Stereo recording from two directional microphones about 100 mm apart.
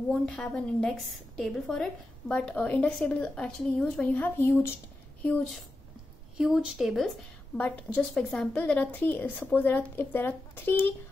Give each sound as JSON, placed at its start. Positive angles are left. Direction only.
{"t": 0.1, "sound": "a woman's voice", "side_deg": 10}
{"t": 6.3, "sound": "a woman's voice", "side_deg": -5}
{"t": 7.5, "sound": "a woman's voice", "side_deg": 15}